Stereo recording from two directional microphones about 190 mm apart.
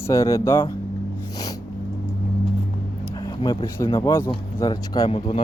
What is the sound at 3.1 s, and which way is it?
Speech, 20° left (ahead or behind).